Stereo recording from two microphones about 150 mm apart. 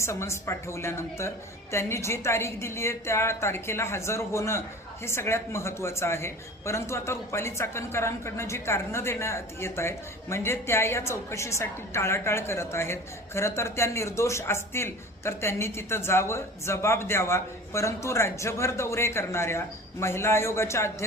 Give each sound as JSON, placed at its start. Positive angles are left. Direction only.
{"t": 0.0, "sound": "speech", "side_deg": 20}